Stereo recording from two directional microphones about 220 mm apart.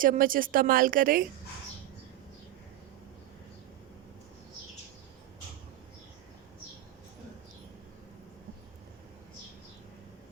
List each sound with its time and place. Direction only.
0.0 s a woman's voice: 40° right (ahead or behind)